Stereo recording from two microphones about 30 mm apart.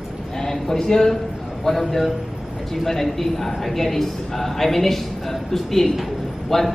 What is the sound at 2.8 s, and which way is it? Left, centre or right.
A man's voice, centre.